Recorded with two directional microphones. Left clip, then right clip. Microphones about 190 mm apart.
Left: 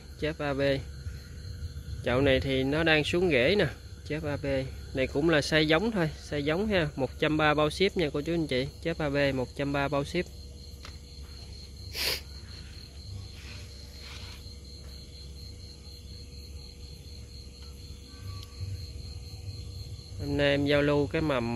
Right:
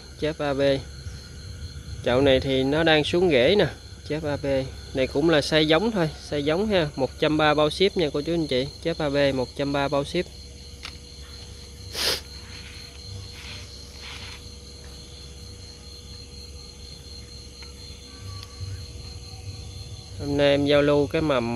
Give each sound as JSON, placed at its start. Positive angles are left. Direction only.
{"t": 0.2, "sound": "speech", "side_deg": -5}
{"t": 2.0, "sound": "speech", "side_deg": -10}
{"t": 11.9, "sound": "a sound", "side_deg": -25}
{"t": 20.2, "sound": "speech", "side_deg": -10}